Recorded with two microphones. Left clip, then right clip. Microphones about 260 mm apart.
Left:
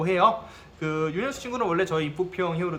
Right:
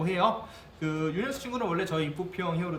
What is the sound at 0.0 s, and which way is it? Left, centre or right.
Speech, centre.